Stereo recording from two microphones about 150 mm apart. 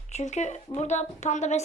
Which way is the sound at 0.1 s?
50° left (ahead or behind).